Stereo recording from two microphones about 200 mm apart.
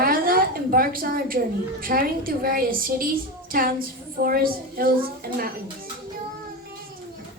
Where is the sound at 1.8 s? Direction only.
45° right (ahead or behind).